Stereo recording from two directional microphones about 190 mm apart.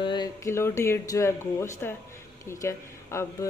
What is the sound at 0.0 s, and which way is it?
A woman's voice, 25° left (ahead or behind).